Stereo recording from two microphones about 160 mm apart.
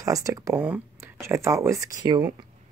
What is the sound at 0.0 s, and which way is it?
Speech, 20° right (ahead or behind).